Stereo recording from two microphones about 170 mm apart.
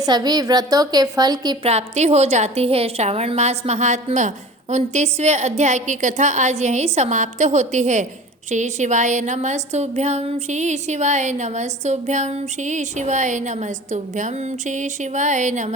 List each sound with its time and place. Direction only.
0.0 s a woman's voice: 25° right (ahead or behind)
1.6 s a woman's voice: 40° right (ahead or behind)